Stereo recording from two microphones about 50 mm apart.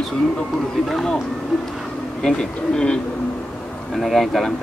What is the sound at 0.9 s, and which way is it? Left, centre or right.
Speech, centre.